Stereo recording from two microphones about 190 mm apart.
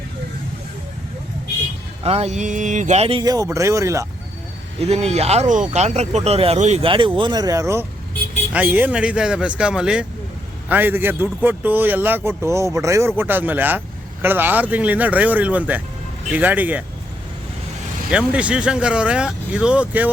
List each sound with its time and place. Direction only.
2.0 s speech: 35° right (ahead or behind); by 4.0 s 15° right (ahead or behind)
4.8 s a man's voice: 35° right (ahead or behind); by 16.8 s 10° right (ahead or behind)
18.1 s speech: 5° right (ahead or behind)